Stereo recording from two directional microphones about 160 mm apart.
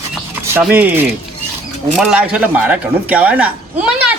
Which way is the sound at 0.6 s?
10° right (ahead or behind).